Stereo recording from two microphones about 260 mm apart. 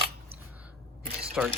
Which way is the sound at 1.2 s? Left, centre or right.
Centre.